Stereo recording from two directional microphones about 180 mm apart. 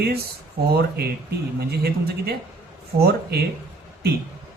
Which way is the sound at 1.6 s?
60° right (ahead or behind).